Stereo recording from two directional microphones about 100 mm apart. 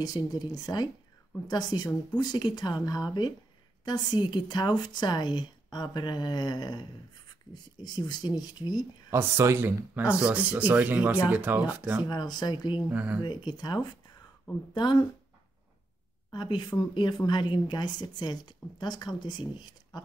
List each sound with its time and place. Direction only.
0.0 s speech: 40° left (ahead or behind)
7.8 s speech: 45° left (ahead or behind)
9.1 s speech: 25° right (ahead or behind)
12.1 s speech: 45° left (ahead or behind)
12.9 s speech: 15° right (ahead or behind)
13.2 s speech: 45° left (ahead or behind)
16.3 s speech: 50° left (ahead or behind)